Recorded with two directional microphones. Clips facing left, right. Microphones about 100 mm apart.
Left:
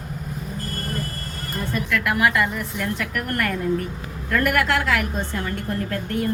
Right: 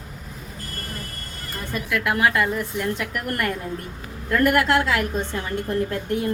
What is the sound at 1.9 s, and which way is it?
A woman's voice, 25° right (ahead or behind).